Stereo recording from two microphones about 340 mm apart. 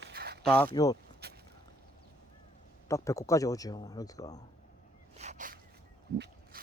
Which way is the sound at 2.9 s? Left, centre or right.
Centre.